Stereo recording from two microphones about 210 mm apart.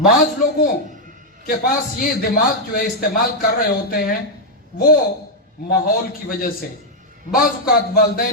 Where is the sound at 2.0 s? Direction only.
40° left (ahead or behind).